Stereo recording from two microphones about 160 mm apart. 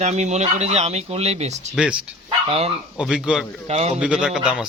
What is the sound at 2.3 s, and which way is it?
Dog, 35° right (ahead or behind).